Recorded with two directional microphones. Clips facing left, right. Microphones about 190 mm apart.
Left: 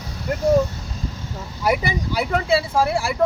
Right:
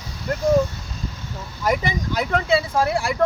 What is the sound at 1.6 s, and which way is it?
Speech, 10° left (ahead or behind).